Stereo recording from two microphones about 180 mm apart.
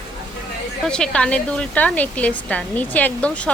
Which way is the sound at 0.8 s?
5° left (ahead or behind).